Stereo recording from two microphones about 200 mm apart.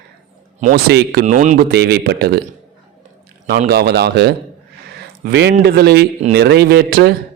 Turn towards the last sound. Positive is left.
turn(degrees=-50)  # may be behind; listen again after turning